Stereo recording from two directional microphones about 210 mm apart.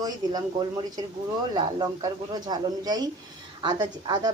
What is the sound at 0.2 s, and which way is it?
Speech, 20° right (ahead or behind).